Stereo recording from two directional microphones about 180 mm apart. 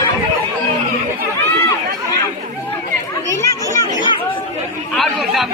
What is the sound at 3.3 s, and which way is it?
Chatter, 15° left (ahead or behind).